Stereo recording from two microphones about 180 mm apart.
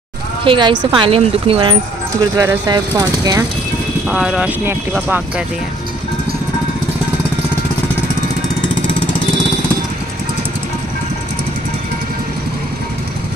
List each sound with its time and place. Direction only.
0.5 s speech: 25° right (ahead or behind)
2.3 s speech: 20° right (ahead or behind)
4.1 s speech: 5° right (ahead or behind)